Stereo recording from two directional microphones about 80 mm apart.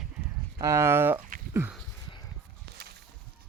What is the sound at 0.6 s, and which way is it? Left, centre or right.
Speech, right.